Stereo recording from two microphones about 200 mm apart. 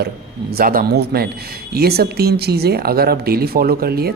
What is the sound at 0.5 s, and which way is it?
Speech, 45° right (ahead or behind).